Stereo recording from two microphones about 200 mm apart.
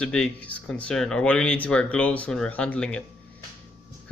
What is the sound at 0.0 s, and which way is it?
Speech, 5° left (ahead or behind).